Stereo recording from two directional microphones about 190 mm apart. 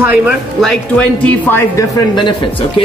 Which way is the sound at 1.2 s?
10° left (ahead or behind).